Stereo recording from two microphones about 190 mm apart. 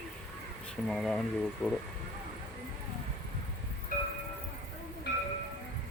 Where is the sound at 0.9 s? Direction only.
Centre (ahead or behind).